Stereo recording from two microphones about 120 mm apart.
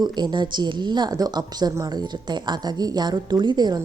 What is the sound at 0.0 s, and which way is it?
Speech, 35° right (ahead or behind).